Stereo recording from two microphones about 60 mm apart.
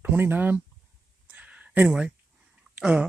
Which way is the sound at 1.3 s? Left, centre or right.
Right.